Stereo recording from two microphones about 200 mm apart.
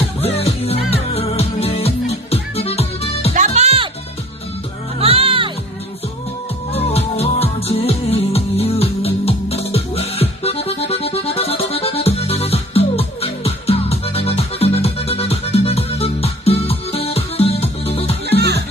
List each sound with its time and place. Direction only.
0.2 s music: 30° left (ahead or behind)
3.3 s music: 35° right (ahead or behind)
4.9 s music: 30° right (ahead or behind)
6.7 s music: 30° left (ahead or behind)
18.3 s music: 55° right (ahead or behind)